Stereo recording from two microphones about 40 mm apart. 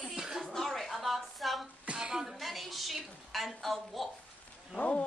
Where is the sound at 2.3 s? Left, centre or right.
Centre.